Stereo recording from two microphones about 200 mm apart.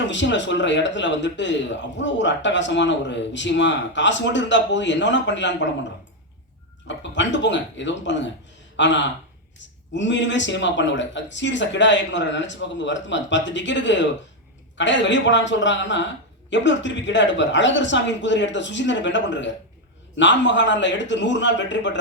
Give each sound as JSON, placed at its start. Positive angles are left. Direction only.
{"t": 0.0, "sound": "a man's voice", "side_deg": 65}
{"t": 6.8, "sound": "a man's voice", "side_deg": 65}